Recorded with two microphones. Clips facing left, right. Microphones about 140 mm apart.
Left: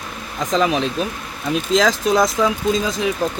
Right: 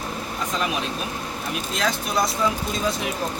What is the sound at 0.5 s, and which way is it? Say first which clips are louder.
Speech: left 10 dB; 90° left.